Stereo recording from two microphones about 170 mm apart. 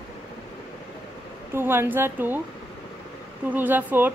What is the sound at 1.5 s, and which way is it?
Speech, 15° right (ahead or behind).